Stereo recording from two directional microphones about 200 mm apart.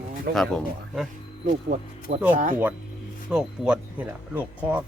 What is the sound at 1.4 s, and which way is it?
Speech, 40° right (ahead or behind).